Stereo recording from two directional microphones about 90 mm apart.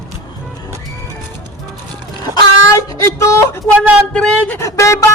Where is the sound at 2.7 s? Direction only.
35° left (ahead or behind).